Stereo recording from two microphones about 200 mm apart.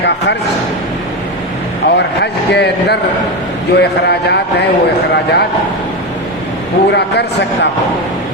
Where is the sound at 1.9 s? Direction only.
55° left (ahead or behind).